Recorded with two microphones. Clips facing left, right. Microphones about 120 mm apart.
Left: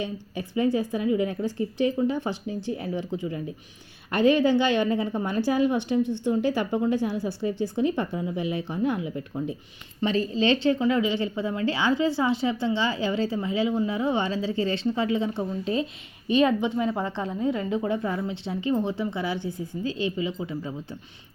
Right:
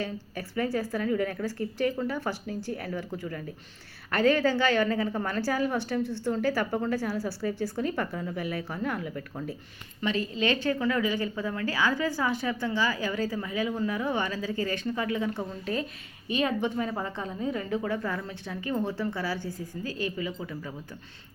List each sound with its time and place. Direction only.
0.0 s a woman's voice: 20° left (ahead or behind)
10.0 s a woman's voice: 30° left (ahead or behind); by 17.0 s 15° left (ahead or behind)
17.2 s a woman's voice: 25° left (ahead or behind)